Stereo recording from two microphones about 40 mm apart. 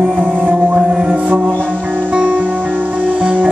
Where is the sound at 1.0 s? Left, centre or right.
Right.